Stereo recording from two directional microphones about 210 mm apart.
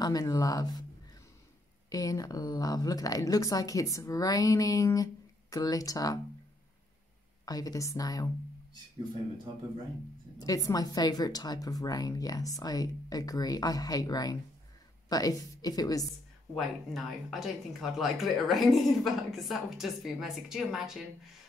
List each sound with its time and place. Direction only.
0.0 s a woman's voice: 15° left (ahead or behind)
1.9 s a woman's voice: 15° left (ahead or behind)
7.4 s a woman's voice: 15° left (ahead or behind)
10.4 s a woman's voice: 15° left (ahead or behind)
16.5 s speech: centre (ahead or behind)